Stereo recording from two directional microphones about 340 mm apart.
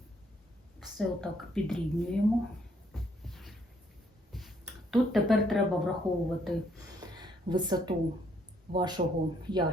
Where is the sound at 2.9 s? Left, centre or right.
Centre.